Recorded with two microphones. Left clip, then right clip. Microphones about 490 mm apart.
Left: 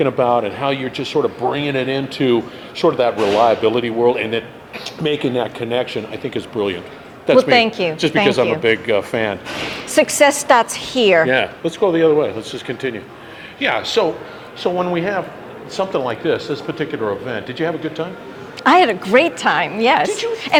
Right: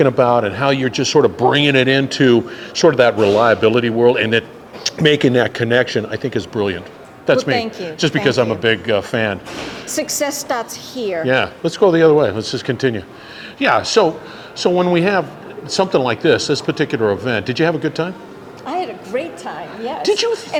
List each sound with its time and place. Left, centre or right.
0.0 s speech: right
6.3 s speech: right
7.5 s a woman's voice: left
8.0 s speech: right
9.9 s a woman's voice: left
11.6 s speech: right
14.6 s speech: right
18.6 s a woman's voice: left
20.1 s speech: right